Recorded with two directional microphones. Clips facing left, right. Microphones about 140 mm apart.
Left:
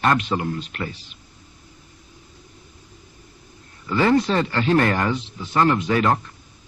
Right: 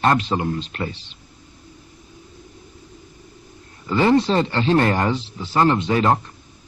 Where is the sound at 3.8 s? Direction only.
25° right (ahead or behind).